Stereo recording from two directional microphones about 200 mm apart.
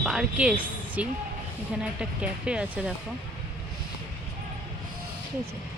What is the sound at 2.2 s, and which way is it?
Speech, 5° right (ahead or behind).